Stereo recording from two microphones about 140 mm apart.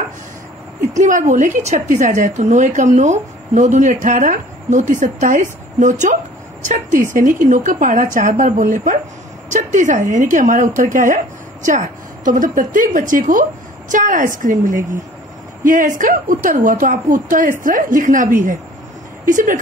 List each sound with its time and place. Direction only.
0.9 s a woman's voice: 65° right (ahead or behind)